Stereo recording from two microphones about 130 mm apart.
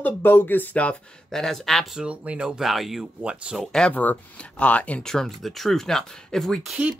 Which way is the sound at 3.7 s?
10° left (ahead or behind).